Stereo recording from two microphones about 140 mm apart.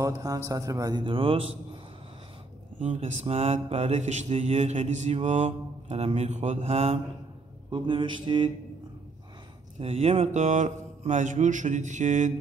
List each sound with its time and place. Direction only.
0.0 s a man's voice: 25° right (ahead or behind); by 1.8 s 40° right (ahead or behind)
2.8 s mantra: 55° right (ahead or behind)
7.7 s mantra: 35° right (ahead or behind)
9.8 s speech: 45° right (ahead or behind)